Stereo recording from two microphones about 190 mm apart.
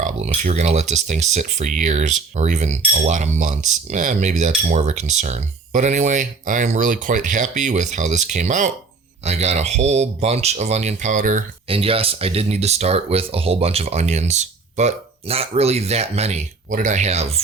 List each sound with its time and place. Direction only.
0.0 s speech: 40° right (ahead or behind)
11.7 s speech: 30° right (ahead or behind)